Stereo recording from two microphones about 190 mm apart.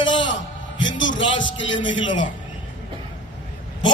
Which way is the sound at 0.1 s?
80° left.